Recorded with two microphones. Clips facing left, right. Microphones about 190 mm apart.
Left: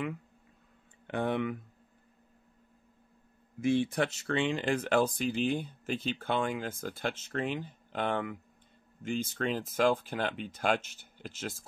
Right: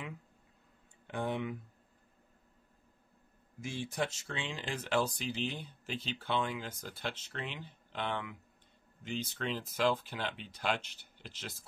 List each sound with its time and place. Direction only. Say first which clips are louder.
1.0 s speech: left 5 dB; 65° left (ahead or behind)
3.6 s speech: left 9 dB; 60° left (ahead or behind)